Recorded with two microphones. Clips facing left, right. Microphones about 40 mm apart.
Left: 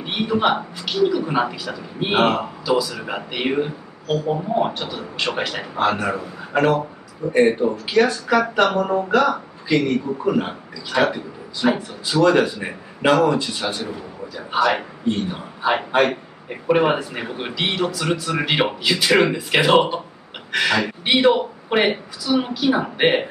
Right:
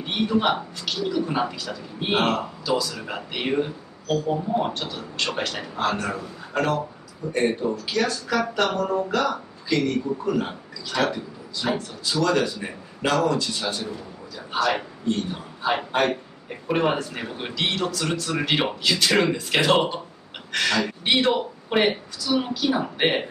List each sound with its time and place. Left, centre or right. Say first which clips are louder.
0.0 s a man's voice: left 2 dB; centre